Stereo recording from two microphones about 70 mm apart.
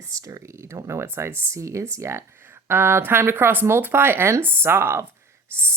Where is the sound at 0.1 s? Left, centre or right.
Right.